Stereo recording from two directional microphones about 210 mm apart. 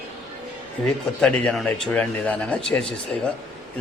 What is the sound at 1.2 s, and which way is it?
A man's voice, 5° left (ahead or behind).